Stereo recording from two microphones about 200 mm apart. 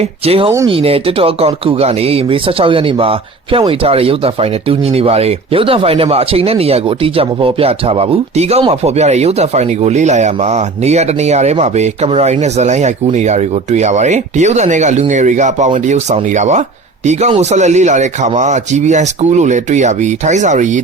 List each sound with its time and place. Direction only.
0.3 s speech: 30° right (ahead or behind)